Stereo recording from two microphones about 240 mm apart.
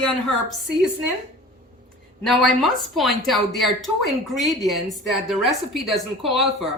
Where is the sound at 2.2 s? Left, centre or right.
Centre.